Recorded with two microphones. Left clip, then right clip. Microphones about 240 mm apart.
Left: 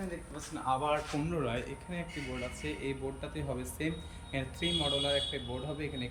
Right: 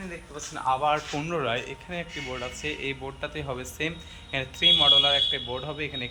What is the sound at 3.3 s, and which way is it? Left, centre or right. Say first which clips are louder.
A man's voice: right 7 dB; centre.